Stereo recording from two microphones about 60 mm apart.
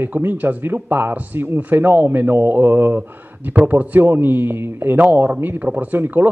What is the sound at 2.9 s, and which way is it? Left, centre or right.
Speech, right.